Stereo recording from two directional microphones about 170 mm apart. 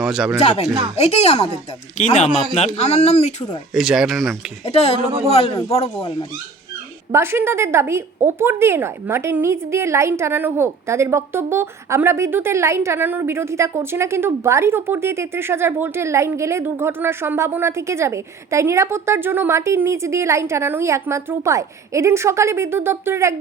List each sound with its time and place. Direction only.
0.0 s speech: 5° right (ahead or behind)
0.3 s speech: 40° left (ahead or behind)
2.3 s speech: centre (ahead or behind)
2.6 s speech: 40° left (ahead or behind)
3.8 s speech: centre (ahead or behind)
4.6 s speech: 35° left (ahead or behind)
7.1 s a woman's voice: 15° right (ahead or behind)